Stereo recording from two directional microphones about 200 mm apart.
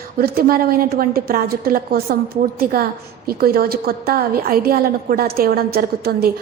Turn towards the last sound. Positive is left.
turn(degrees=-50)  # may be behind; listen again after turning